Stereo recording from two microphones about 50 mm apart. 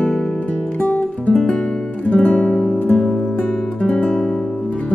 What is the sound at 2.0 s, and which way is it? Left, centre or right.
Music, left.